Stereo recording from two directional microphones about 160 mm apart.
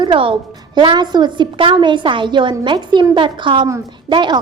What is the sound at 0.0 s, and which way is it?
A woman's voice, 30° right (ahead or behind).